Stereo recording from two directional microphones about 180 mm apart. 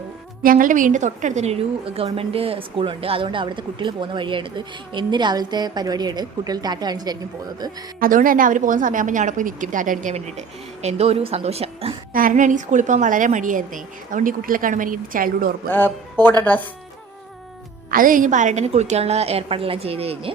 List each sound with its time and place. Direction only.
0.4 s a woman's voice: 50° right (ahead or behind); by 7.2 s 20° right (ahead or behind)
7.9 s a woman's voice: 50° right (ahead or behind); by 11.9 s 35° right (ahead or behind)
12.1 s a woman's voice: 45° right (ahead or behind)
15.7 s speech: 10° left (ahead or behind)
17.9 s a woman's voice: 50° right (ahead or behind); by 20.3 s 35° right (ahead or behind)